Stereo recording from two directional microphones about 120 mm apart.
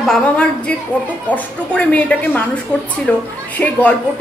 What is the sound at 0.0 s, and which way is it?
A woman's voice, 5° left (ahead or behind).